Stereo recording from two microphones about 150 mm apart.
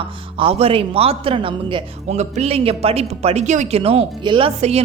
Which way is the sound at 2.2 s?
45° right (ahead or behind).